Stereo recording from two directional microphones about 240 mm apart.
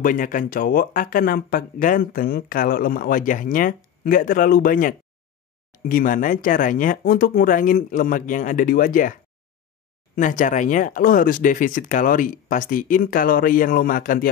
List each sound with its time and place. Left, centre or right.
0.0 s speech: left
10.1 s speech: left